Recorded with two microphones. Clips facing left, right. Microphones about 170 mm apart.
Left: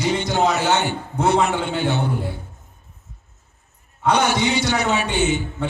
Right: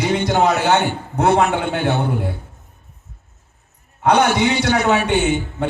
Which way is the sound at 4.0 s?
55° right (ahead or behind).